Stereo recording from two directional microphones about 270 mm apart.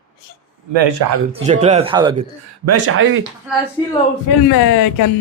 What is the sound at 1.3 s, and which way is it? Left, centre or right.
Speech, right.